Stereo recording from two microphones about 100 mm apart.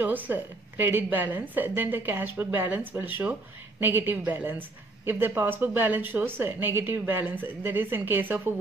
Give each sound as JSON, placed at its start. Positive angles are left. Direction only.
{"t": 0.0, "sound": "a woman's voice", "side_deg": -20}